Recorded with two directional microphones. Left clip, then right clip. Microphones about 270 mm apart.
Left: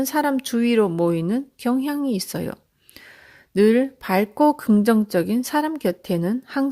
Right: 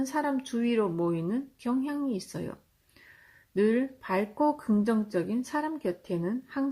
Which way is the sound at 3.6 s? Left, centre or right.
Left.